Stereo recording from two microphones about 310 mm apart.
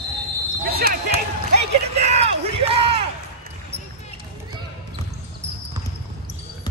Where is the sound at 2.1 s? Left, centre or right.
Centre.